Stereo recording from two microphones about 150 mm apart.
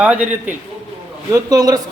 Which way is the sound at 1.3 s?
25° right (ahead or behind).